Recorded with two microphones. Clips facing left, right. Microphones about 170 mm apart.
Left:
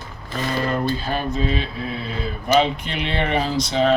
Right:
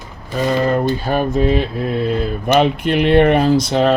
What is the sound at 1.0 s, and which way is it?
Speech, 50° right (ahead or behind).